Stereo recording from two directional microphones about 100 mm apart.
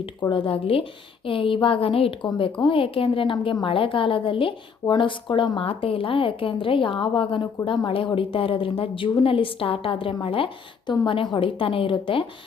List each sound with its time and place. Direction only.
0.2 s a woman's voice: 55° left (ahead or behind)
2.6 s a woman's voice: 60° left (ahead or behind)